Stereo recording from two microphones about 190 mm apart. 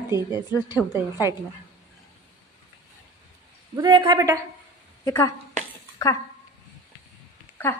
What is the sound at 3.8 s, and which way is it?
Speech, 20° right (ahead or behind).